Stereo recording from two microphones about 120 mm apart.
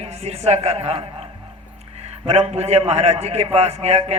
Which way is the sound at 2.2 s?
60° right (ahead or behind).